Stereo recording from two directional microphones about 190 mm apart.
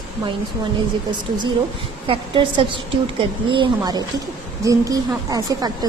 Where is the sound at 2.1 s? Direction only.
25° right (ahead or behind).